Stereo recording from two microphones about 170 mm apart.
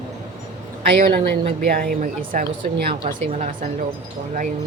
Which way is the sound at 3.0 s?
45° right (ahead or behind).